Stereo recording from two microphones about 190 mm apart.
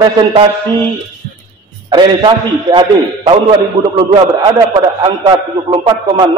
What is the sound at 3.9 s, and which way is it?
A man's voice, 25° right (ahead or behind).